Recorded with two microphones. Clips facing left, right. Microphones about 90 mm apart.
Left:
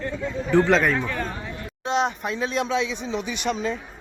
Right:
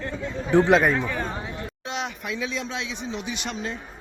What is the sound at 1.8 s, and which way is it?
Speech, 35° left (ahead or behind).